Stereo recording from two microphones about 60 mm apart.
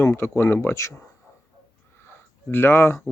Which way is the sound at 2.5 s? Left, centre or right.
Left.